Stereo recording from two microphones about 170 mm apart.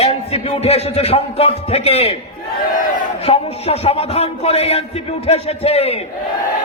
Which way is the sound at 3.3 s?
35° left (ahead or behind).